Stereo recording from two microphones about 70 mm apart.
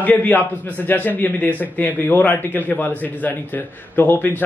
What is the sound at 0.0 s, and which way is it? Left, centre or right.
Speech, left.